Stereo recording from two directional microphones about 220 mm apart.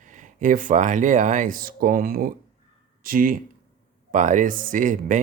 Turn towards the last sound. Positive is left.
turn(degrees=-35)  # may be behind; listen again after turning